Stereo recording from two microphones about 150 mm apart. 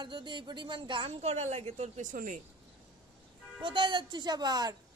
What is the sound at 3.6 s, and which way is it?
Speech, 35° right (ahead or behind).